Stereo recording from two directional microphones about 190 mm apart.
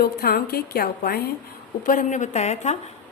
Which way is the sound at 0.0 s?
55° left (ahead or behind).